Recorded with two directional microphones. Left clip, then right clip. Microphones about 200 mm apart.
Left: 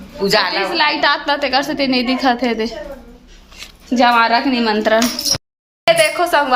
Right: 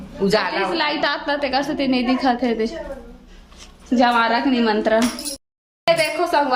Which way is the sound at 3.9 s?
5° left (ahead or behind).